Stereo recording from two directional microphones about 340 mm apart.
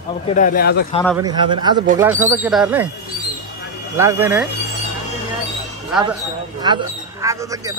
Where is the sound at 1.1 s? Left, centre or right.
Centre.